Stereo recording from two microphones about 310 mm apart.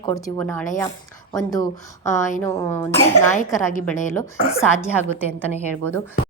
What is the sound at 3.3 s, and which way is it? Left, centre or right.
Speech, left.